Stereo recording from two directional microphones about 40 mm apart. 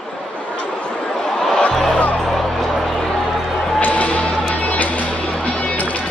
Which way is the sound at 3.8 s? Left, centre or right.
Left.